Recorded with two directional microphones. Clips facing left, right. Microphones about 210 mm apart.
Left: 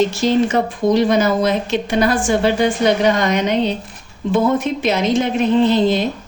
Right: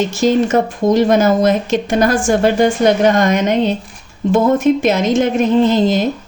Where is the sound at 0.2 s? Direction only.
45° right (ahead or behind).